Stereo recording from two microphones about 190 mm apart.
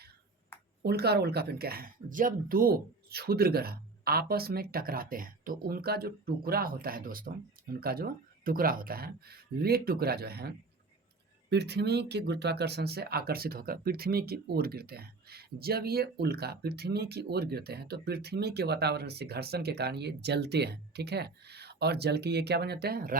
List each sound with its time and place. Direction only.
0.8 s speech: 55° right (ahead or behind)